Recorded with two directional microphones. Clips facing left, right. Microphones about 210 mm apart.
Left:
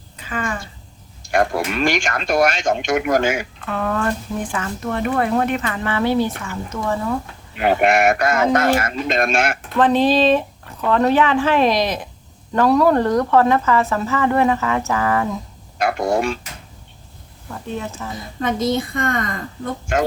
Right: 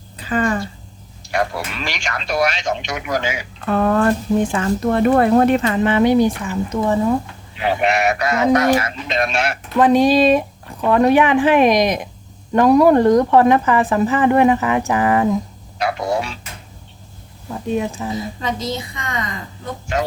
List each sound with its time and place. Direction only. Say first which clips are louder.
0.2 s a sound: right 7 dB; 35° right (ahead or behind)
1.3 s speech: left 3 dB; 50° left (ahead or behind)
3.7 s speech: right 6 dB; 40° right (ahead or behind)
4.4 s speech: right 7 dB; 25° right (ahead or behind)
4.6 s speech: right 7 dB; 40° right (ahead or behind)
5.6 s speech: right 6 dB; 20° right (ahead or behind)
7.5 s speech: left 2 dB; 50° left (ahead or behind)
9.7 s speech: right 3 dB; 10° right (ahead or behind)
15.8 s speech: left 2 dB; 50° left (ahead or behind)
17.5 s speech: right 6 dB; 15° right (ahead or behind)
18.3 s speech: left 4 dB; 55° left (ahead or behind)